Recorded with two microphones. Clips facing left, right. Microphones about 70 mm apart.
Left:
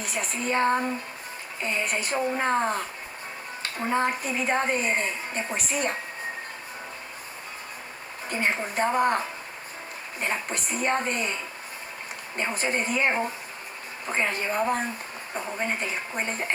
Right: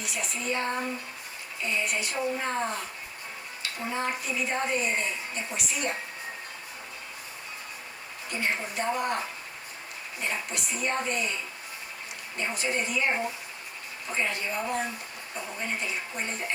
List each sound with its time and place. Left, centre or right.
0.0 s a woman's voice: left
8.3 s a woman's voice: left
12.4 s a woman's voice: left